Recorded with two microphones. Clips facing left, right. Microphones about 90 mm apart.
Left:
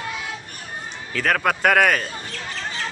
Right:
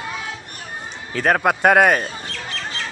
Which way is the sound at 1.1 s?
25° right (ahead or behind).